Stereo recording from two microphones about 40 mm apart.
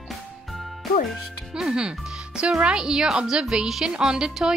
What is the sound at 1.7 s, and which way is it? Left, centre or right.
Speech, right.